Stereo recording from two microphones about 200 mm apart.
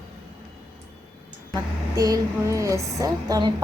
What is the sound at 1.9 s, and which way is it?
Speech, 15° right (ahead or behind).